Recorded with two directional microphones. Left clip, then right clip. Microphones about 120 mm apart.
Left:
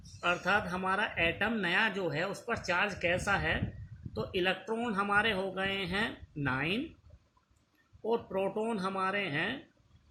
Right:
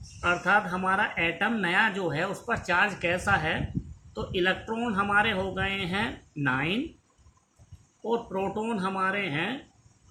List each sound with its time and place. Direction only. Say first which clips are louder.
0.2 s speech: right 6 dB; 35° left (ahead or behind)
8.3 s speech: right 3 dB; 35° left (ahead or behind)